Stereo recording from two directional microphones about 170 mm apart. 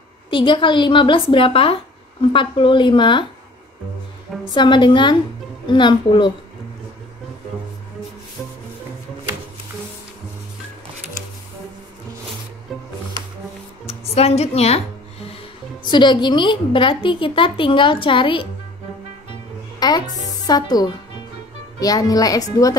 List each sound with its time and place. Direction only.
0.3 s a woman's voice: 30° left (ahead or behind)
4.6 s a woman's voice: 25° left (ahead or behind)
13.8 s a woman's voice: 35° left (ahead or behind)
15.8 s a woman's voice: 25° left (ahead or behind)
19.8 s a woman's voice: 25° left (ahead or behind)